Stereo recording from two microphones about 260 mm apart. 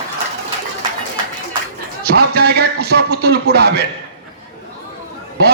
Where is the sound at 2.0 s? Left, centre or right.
Right.